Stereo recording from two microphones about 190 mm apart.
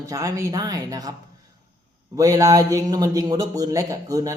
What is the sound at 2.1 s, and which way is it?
A man's voice, 20° right (ahead or behind).